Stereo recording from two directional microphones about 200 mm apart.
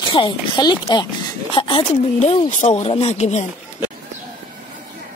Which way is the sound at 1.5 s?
25° left (ahead or behind).